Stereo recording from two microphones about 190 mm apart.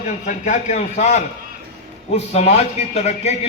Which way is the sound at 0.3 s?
40° left (ahead or behind).